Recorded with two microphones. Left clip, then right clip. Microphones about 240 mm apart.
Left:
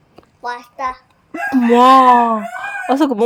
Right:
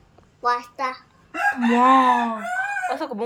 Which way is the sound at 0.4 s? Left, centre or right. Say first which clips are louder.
Even; centre.